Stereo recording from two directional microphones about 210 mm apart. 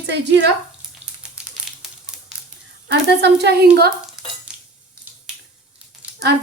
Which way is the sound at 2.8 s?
55° right (ahead or behind).